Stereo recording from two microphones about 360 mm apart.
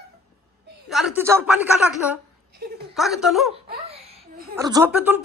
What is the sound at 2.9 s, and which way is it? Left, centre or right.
Speech, centre.